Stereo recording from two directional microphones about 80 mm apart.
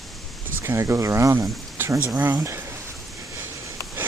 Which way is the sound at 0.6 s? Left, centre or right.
Right.